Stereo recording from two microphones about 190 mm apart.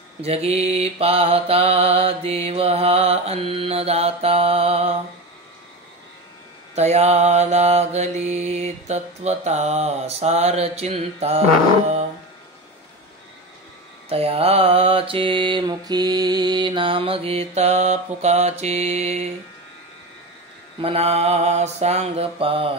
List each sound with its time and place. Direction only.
0.2 s mantra: 30° right (ahead or behind)
6.7 s mantra: 35° right (ahead or behind)
14.0 s mantra: 30° right (ahead or behind)
20.8 s mantra: 30° right (ahead or behind)